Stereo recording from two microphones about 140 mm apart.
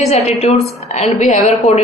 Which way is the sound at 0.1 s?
50° left (ahead or behind).